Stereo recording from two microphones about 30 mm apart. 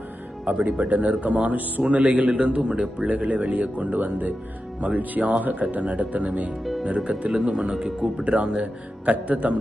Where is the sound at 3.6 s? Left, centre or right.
Right.